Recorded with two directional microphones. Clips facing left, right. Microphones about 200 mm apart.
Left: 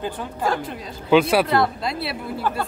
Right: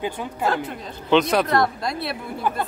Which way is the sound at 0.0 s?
10° right (ahead or behind).